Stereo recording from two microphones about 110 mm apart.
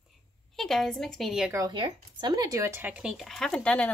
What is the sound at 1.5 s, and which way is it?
Speech, 30° right (ahead or behind).